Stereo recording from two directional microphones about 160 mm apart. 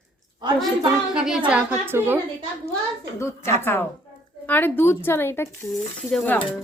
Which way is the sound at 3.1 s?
15° left (ahead or behind).